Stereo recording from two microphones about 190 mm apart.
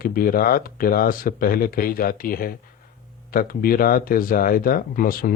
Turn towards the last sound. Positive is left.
turn(degrees=50)  # may be behind; listen again after turning